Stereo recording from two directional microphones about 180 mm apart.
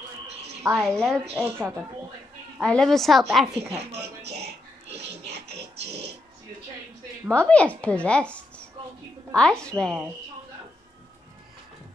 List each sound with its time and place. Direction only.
0.7 s a woman's voice: centre (ahead or behind)
1.3 s a woman's voice: 10° right (ahead or behind)
2.6 s a woman's voice: 5° left (ahead or behind)
3.7 s speech: 35° right (ahead or behind)
4.8 s music: 35° right (ahead or behind)
7.3 s a woman's voice: 5° left (ahead or behind)